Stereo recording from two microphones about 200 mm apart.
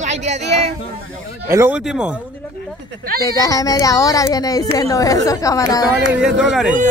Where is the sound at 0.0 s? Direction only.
35° right (ahead or behind).